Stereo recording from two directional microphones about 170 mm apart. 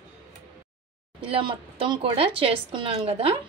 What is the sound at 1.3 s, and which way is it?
A woman's voice, 30° right (ahead or behind).